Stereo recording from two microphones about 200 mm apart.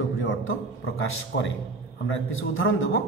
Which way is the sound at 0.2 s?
90° left.